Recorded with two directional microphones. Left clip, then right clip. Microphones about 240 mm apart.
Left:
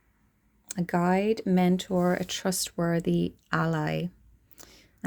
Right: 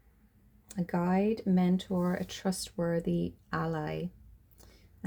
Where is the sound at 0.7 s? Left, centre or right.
Left.